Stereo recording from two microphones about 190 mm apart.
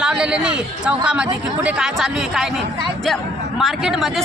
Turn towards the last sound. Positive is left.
turn(degrees=0)  # may be behind; listen again after turning